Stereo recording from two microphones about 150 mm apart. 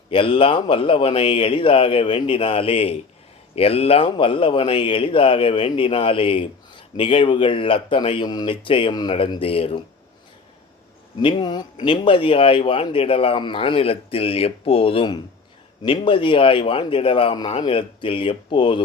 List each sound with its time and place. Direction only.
0.1 s speech: 35° left (ahead or behind)
11.2 s speech: 30° left (ahead or behind)